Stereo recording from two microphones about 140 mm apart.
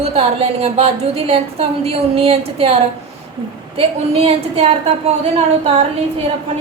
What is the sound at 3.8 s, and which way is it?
Speech, 45° right (ahead or behind).